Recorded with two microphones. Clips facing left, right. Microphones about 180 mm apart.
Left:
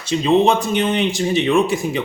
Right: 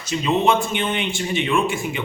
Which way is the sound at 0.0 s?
30° left (ahead or behind).